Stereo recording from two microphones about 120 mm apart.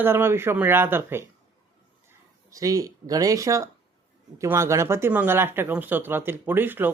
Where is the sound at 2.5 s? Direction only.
30° right (ahead or behind).